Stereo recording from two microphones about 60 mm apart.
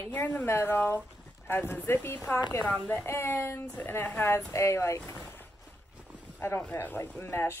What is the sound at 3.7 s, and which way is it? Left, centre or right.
Speech, left.